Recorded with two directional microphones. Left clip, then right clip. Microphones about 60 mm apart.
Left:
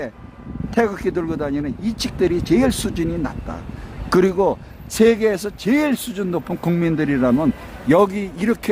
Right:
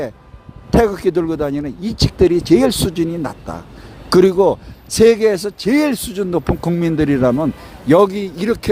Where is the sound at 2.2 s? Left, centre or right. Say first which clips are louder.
Right 5 dB; right.